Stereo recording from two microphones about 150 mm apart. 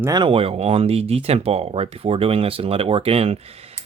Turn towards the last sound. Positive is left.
turn(degrees=-40)  # may be behind; listen again after turning